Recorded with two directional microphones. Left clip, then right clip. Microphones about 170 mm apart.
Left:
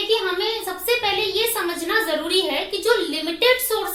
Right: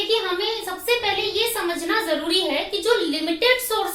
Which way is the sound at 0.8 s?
25° left (ahead or behind).